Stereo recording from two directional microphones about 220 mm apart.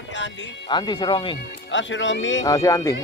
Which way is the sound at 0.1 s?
55° left (ahead or behind).